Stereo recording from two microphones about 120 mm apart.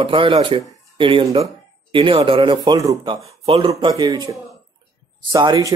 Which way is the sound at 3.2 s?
55° right (ahead or behind).